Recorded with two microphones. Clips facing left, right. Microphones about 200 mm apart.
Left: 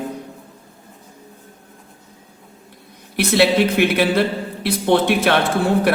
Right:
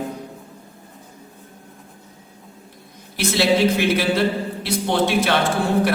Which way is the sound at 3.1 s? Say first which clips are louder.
Left 3 dB; 60° left (ahead or behind).